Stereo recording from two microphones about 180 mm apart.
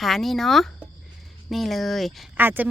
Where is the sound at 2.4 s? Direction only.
10° right (ahead or behind).